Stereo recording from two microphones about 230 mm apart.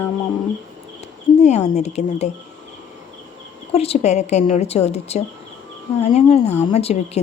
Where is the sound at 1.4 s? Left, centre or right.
Left.